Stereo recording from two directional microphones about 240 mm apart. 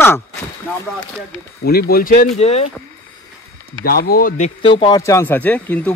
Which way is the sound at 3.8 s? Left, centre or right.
Left.